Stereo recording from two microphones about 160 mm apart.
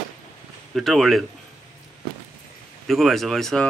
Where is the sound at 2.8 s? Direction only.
Centre (ahead or behind).